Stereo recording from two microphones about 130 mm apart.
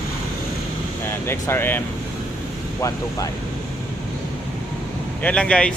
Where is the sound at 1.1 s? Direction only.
20° left (ahead or behind).